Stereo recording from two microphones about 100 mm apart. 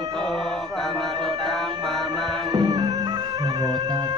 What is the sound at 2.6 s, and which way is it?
Music, 45° right (ahead or behind).